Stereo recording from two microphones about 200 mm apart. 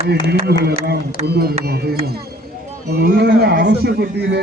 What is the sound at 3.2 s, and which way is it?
Speech, 55° right (ahead or behind).